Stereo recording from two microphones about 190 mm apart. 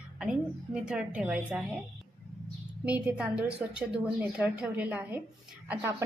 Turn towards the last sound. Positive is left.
turn(degrees=-15)  # may be behind; listen again after turning